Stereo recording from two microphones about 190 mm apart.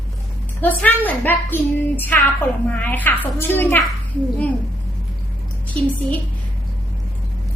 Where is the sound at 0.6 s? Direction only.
10° left (ahead or behind).